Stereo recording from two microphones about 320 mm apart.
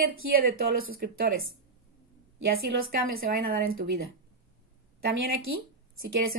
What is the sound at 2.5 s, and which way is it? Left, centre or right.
Speech, right.